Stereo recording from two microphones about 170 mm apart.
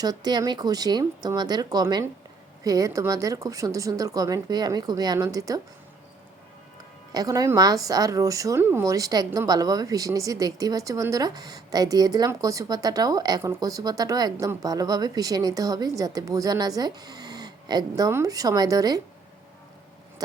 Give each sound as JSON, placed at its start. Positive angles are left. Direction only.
{"t": 0.0, "sound": "a woman's voice", "side_deg": -20}
{"t": 7.1, "sound": "a woman's voice", "side_deg": -20}